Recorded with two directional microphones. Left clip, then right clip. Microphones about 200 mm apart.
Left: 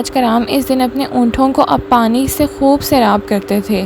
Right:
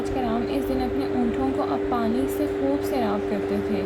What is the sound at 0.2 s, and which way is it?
A woman's voice, 60° left (ahead or behind).